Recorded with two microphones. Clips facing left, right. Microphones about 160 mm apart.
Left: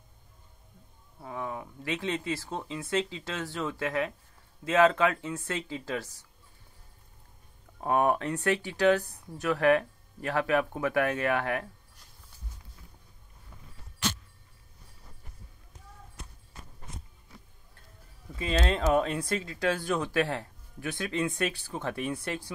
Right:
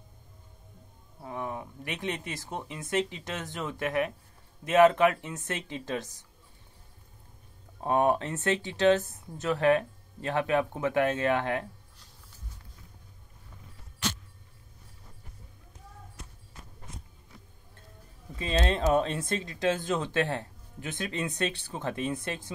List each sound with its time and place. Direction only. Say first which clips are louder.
1.2 s speech: right 1 dB; 20° right (ahead or behind)
7.8 s speech: right 1 dB; 20° right (ahead or behind)
18.4 s speech: even; 25° right (ahead or behind)